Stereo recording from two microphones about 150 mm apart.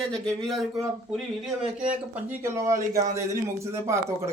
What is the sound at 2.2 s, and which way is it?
A man's voice, 15° right (ahead or behind).